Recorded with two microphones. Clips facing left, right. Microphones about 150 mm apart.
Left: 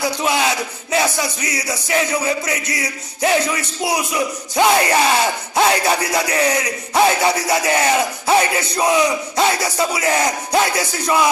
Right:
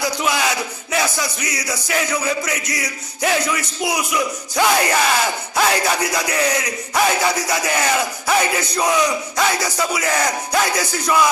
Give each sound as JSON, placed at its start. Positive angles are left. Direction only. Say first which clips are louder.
{"t": 0.2, "sound": "music", "louder": "left 2 dB", "side_deg": 25}